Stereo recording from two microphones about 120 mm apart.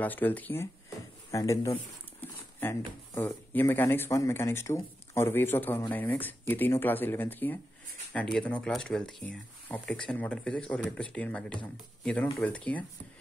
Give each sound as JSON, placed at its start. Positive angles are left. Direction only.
{"t": 0.0, "sound": "speech", "side_deg": 15}
{"t": 3.2, "sound": "speech", "side_deg": 20}